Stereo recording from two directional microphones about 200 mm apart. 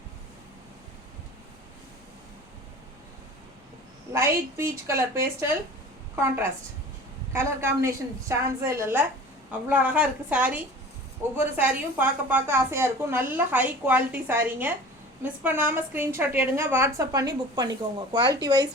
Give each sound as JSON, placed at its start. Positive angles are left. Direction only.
{"t": 4.1, "sound": "a woman's voice", "side_deg": -10}
{"t": 7.3, "sound": "a woman's voice", "side_deg": -15}